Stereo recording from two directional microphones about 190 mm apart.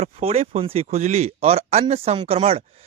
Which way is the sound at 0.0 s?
30° right (ahead or behind).